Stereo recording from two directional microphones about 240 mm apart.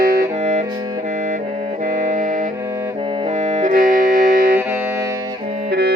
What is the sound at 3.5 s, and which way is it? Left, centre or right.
Music, right.